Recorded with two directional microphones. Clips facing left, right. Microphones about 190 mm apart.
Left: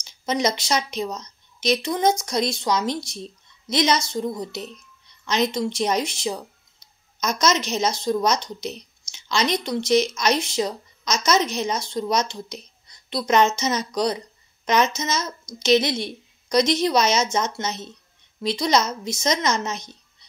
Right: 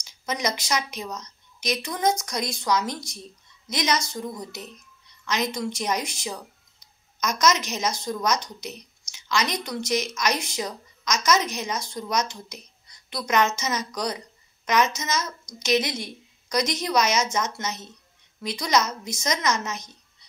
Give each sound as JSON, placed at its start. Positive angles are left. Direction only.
{"t": 0.0, "sound": "speech", "side_deg": 25}